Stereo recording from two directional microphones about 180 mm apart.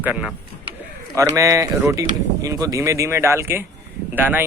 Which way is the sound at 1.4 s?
20° right (ahead or behind).